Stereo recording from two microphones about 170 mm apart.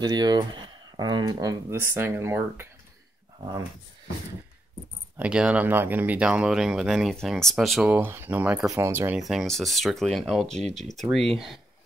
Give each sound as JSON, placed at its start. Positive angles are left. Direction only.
{"t": 0.0, "sound": "speech", "side_deg": -25}
{"t": 5.1, "sound": "speech", "side_deg": -5}
{"t": 9.2, "sound": "speech", "side_deg": 0}